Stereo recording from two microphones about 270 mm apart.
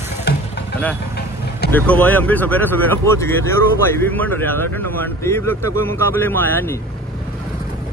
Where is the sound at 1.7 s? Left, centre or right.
Centre.